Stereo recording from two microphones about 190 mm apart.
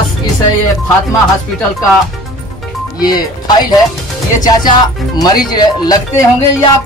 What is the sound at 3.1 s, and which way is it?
Speech, 20° left (ahead or behind).